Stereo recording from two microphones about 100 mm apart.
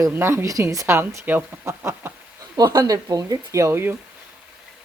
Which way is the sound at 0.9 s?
20° right (ahead or behind).